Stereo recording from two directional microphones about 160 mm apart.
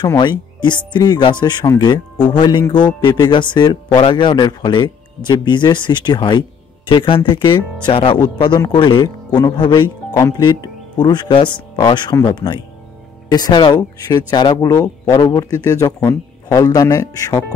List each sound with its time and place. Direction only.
0.0 s speech: 25° left (ahead or behind)